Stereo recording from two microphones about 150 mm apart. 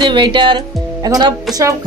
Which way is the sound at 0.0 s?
30° right (ahead or behind).